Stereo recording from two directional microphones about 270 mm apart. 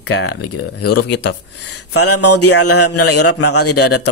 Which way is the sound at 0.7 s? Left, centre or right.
Left.